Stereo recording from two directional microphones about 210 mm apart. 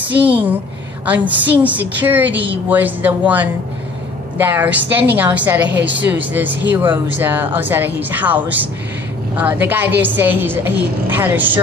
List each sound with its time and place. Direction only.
0.1 s a woman's voice: 5° right (ahead or behind)
2.3 s a woman's voice: 55° right (ahead or behind)
2.7 s a woman's voice: 10° right (ahead or behind)